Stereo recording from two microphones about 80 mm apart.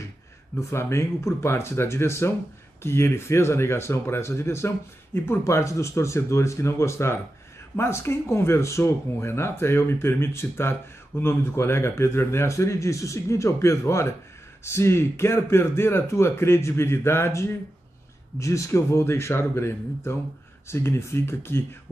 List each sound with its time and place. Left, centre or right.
0.6 s speech: left